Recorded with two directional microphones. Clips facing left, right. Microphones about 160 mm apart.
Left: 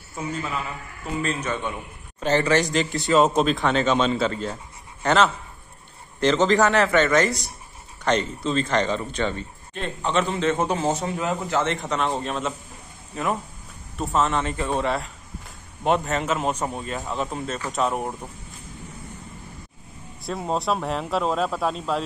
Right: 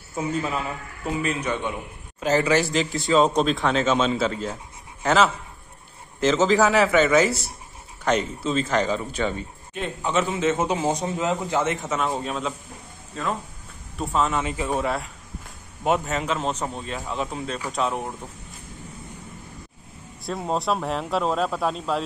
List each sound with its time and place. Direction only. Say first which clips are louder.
1.2 s speech: even; 10° right (ahead or behind)
13.1 s speech: left 2 dB; 15° left (ahead or behind)
13.9 s speech: left 1 dB; centre (ahead or behind)
14.4 s speech: even; 10° right (ahead or behind)
16.3 s speech: left 2 dB; 10° left (ahead or behind)
20.2 s speech: even; centre (ahead or behind)